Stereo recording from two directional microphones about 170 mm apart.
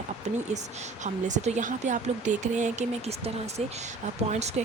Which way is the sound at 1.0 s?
45° right (ahead or behind).